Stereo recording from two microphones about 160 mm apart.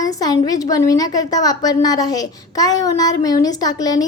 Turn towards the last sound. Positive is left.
turn(degrees=25)  # may be behind; listen again after turning